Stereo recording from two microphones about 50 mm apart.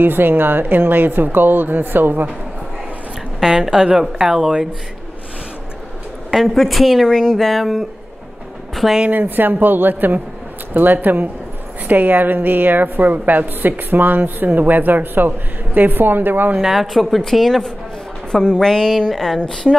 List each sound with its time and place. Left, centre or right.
0.0 s speech: right
3.3 s speech: centre
6.3 s a woman's voice: centre
7.1 s a woman's voice: centre
9.1 s a woman's voice: right
16.5 s a woman's voice: centre